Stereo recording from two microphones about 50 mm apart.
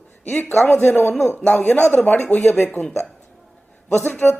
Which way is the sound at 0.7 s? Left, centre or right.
Left.